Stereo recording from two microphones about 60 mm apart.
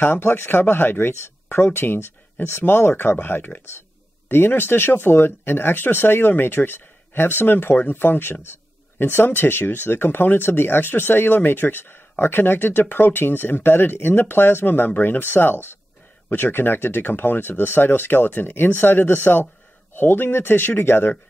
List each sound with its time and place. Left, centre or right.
0.0 s speech: left